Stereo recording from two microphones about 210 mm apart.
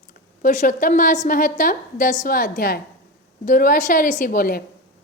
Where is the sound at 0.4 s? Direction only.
35° left (ahead or behind).